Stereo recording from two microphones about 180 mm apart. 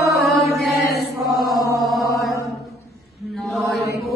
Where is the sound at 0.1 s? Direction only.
Centre (ahead or behind).